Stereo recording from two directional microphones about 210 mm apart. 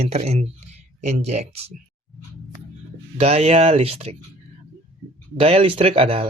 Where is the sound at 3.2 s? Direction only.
30° right (ahead or behind).